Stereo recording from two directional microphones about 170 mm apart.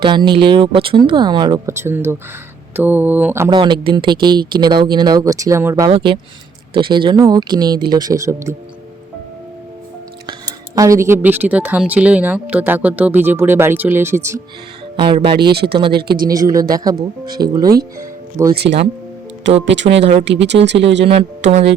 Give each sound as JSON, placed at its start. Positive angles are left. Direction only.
{"t": 0.0, "sound": "speech", "side_deg": -25}
{"t": 3.5, "sound": "speech", "side_deg": -30}
{"t": 5.9, "sound": "speech", "side_deg": -30}
{"t": 10.8, "sound": "speech", "side_deg": -20}
{"t": 14.9, "sound": "speech", "side_deg": -30}
{"t": 16.0, "sound": "speech", "side_deg": -70}
{"t": 16.2, "sound": "speech", "side_deg": -20}
{"t": 17.9, "sound": "music", "side_deg": -20}
{"t": 18.5, "sound": "speech", "side_deg": -75}
{"t": 19.6, "sound": "speech", "side_deg": -90}
{"t": 21.0, "sound": "speech", "side_deg": -35}